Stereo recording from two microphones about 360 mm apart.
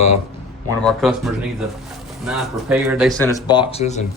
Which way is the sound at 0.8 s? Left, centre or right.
Centre.